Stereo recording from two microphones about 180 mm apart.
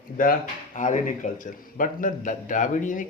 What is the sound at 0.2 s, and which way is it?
A man's voice, 50° left (ahead or behind).